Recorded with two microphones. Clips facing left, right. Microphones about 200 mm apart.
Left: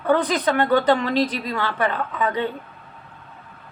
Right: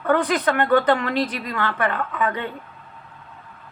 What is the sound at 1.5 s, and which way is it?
Speech, 25° left (ahead or behind).